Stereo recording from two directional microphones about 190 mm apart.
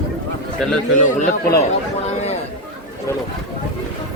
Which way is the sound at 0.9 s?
40° left (ahead or behind).